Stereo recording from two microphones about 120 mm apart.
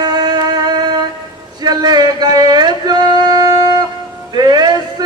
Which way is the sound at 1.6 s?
35° right (ahead or behind).